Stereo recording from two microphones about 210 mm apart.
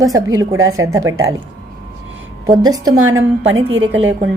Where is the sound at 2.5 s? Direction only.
20° right (ahead or behind).